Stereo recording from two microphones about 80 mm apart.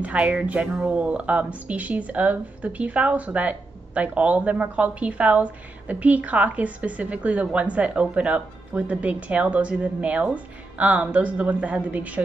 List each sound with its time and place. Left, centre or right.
0.0 s speech: centre